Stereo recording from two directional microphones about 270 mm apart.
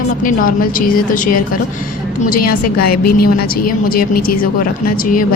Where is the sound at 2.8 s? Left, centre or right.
Left.